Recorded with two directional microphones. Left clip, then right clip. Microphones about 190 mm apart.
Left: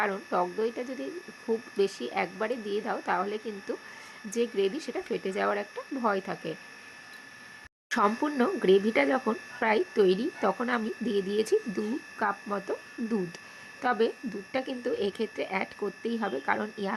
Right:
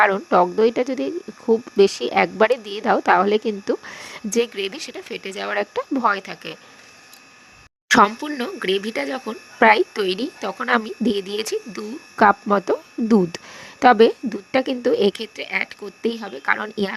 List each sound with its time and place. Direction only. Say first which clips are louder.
0.0 s speech: right 13 dB; 45° right (ahead or behind)
8.5 s speech: right 1 dB; 55° right (ahead or behind)
8.9 s speech: even; centre (ahead or behind)
9.6 s speech: right 11 dB; 50° right (ahead or behind)